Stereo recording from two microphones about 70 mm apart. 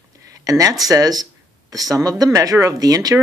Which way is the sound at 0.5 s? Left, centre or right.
Right.